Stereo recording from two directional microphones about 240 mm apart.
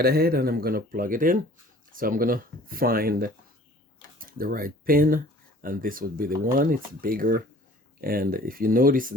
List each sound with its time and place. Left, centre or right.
0.0 s speech: right